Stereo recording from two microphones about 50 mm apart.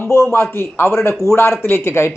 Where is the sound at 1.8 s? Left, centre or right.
Left.